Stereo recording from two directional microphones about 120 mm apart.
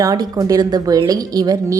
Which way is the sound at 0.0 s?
30° right (ahead or behind).